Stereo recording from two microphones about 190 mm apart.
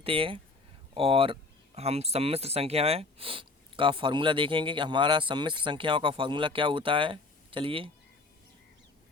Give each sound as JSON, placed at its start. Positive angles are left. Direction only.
{"t": 0.0, "sound": "speech", "side_deg": -30}